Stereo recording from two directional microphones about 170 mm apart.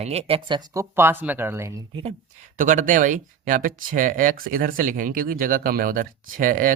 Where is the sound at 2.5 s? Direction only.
50° right (ahead or behind).